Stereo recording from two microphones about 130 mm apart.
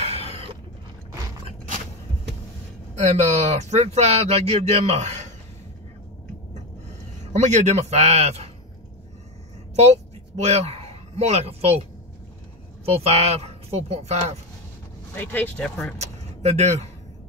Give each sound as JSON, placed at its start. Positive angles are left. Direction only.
{"t": 0.0, "sound": "a sound", "side_deg": -50}
{"t": 3.0, "sound": "speech", "side_deg": -60}
{"t": 7.3, "sound": "speech", "side_deg": -60}
{"t": 10.4, "sound": "a man's voice", "side_deg": -55}
{"t": 12.8, "sound": "speech", "side_deg": -50}
{"t": 15.1, "sound": "speech", "side_deg": 15}
{"t": 16.0, "sound": "a sound", "side_deg": -60}